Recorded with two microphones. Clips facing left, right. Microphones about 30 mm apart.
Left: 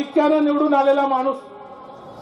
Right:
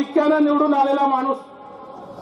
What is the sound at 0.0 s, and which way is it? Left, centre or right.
A man's voice, centre.